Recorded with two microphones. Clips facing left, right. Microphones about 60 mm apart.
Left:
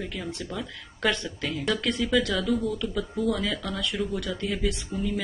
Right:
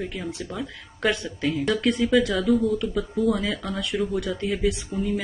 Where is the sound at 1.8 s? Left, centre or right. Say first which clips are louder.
Right 5 dB; centre.